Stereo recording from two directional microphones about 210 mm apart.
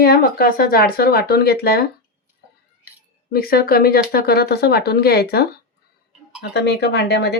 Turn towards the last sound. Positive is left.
turn(degrees=50)  # may be behind; listen again after turning